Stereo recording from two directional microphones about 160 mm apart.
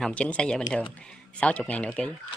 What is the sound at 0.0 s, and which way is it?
Speech, 10° left (ahead or behind).